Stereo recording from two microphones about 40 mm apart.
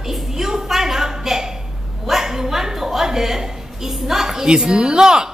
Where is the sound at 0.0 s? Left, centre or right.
Centre.